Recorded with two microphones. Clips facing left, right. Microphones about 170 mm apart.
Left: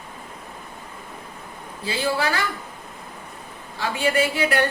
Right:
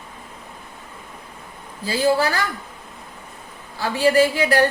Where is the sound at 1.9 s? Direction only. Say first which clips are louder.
Right 5 dB; 40° right (ahead or behind).